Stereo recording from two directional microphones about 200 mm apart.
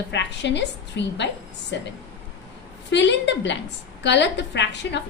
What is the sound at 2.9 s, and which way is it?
A woman's voice, 60° left (ahead or behind).